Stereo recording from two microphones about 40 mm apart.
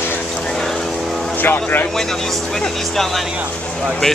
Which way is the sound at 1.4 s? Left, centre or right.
Left.